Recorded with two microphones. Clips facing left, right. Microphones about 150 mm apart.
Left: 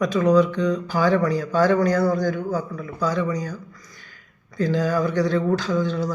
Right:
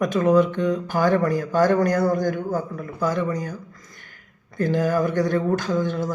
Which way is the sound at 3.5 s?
25° right (ahead or behind).